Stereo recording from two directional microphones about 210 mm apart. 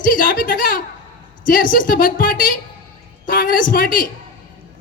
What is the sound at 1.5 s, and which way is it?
A man's voice, 40° left (ahead or behind).